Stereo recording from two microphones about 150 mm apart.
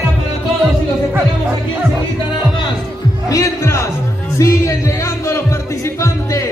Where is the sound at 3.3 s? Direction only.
20° left (ahead or behind).